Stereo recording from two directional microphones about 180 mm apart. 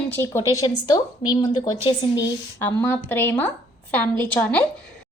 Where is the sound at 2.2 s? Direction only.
15° left (ahead or behind).